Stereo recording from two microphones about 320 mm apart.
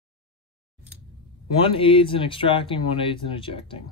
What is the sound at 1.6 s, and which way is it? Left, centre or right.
Speech, centre.